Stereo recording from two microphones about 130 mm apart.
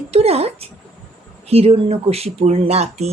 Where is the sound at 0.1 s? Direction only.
50° right (ahead or behind).